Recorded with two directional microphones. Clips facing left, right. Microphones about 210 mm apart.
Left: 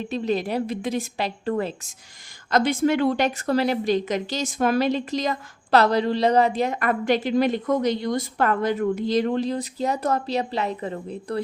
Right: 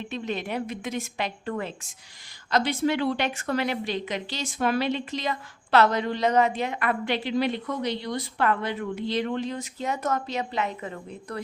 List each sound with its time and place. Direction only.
0.0 s a woman's voice: 35° left (ahead or behind)
2.5 s a woman's voice: 50° left (ahead or behind); by 11.3 s 30° left (ahead or behind)